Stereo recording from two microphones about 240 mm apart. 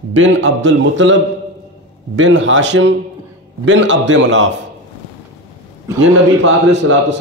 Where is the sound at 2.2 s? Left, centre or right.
Right.